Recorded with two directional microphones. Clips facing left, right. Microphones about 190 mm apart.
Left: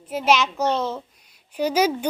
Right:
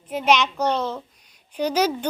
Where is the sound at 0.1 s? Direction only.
5° left (ahead or behind).